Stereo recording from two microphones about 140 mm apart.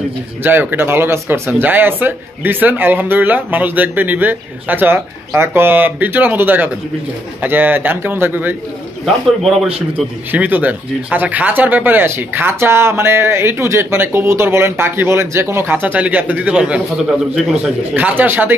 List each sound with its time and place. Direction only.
0.4 s speech: 15° right (ahead or behind)
9.0 s speech: centre (ahead or behind)
10.3 s speech: 10° right (ahead or behind)